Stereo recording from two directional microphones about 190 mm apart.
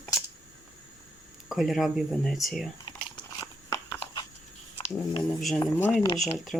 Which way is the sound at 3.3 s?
15° left (ahead or behind).